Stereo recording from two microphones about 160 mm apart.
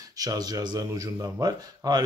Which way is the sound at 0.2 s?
25° right (ahead or behind).